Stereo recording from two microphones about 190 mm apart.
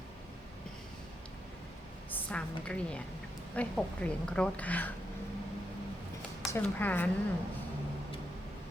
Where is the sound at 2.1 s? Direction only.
5° left (ahead or behind).